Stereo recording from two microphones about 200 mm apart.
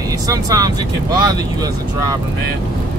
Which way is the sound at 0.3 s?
20° right (ahead or behind).